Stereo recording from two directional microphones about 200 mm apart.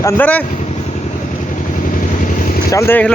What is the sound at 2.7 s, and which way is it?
Speech, 10° left (ahead or behind).